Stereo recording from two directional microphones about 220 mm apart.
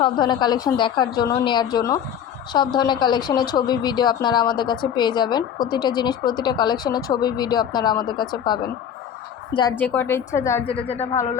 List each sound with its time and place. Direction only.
0.0 s a woman's voice: 20° left (ahead or behind)
9.7 s a woman's voice: 10° left (ahead or behind)